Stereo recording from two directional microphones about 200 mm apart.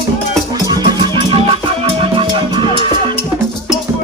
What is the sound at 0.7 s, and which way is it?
Music, 20° right (ahead or behind).